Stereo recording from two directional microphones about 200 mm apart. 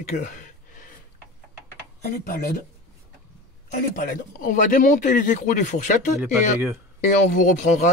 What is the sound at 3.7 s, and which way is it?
Speech, 40° left (ahead or behind).